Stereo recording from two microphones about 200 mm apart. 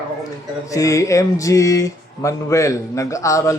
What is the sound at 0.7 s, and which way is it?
Speech, 15° left (ahead or behind).